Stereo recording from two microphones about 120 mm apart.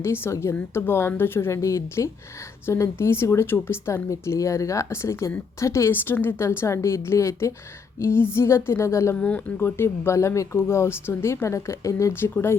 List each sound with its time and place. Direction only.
0.0 s speech: 20° left (ahead or behind)
9.1 s speech: 10° left (ahead or behind)